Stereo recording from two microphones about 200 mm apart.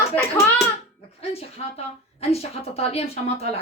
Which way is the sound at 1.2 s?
30° left (ahead or behind).